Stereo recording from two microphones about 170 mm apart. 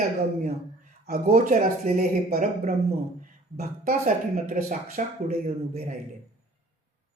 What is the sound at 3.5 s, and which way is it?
Speech, 60° right (ahead or behind).